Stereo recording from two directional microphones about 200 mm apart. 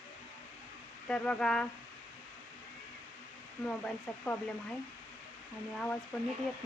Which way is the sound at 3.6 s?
10° left (ahead or behind).